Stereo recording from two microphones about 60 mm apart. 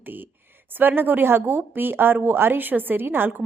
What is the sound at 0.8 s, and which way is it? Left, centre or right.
Speech, right.